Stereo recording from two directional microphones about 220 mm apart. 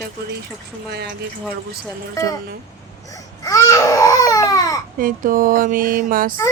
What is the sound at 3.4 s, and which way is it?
Baby cry, 15° left (ahead or behind).